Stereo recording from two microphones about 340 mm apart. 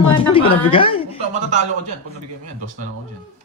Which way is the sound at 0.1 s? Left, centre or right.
Centre.